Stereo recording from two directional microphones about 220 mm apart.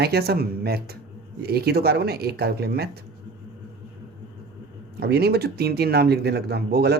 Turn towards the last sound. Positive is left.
turn(degrees=-45)  # may be behind; listen again after turning